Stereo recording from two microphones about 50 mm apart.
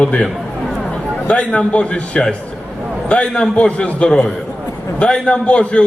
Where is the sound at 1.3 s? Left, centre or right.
Left.